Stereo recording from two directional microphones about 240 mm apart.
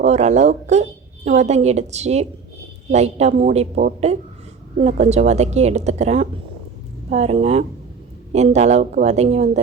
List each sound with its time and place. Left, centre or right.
0.0 s a woman's voice: right